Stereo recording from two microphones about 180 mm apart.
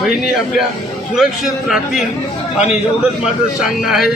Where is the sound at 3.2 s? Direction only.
5° right (ahead or behind).